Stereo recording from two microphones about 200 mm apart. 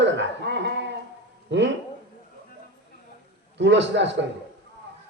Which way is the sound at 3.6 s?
60° right (ahead or behind).